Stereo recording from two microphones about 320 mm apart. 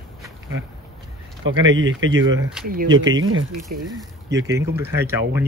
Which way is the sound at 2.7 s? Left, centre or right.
Right.